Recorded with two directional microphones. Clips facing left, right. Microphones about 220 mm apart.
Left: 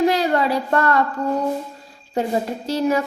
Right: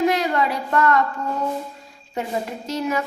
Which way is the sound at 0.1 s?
30° left (ahead or behind).